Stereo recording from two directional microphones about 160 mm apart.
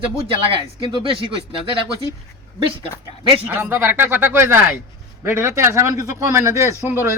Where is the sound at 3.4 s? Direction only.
15° right (ahead or behind).